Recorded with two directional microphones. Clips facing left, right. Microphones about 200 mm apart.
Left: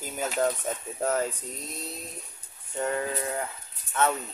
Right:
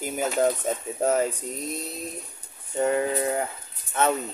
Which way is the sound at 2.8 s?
20° right (ahead or behind).